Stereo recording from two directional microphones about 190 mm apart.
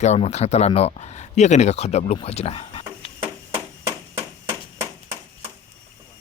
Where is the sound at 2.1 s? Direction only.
30° left (ahead or behind).